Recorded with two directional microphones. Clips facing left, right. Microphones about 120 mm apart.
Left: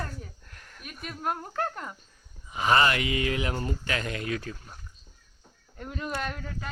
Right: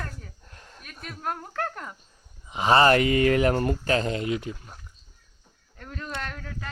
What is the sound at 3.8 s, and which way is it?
Speech, 30° right (ahead or behind).